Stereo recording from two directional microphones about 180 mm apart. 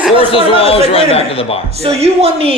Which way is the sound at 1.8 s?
35° right (ahead or behind).